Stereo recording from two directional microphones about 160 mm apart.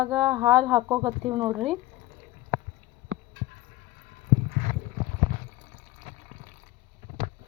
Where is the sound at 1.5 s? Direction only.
Centre (ahead or behind).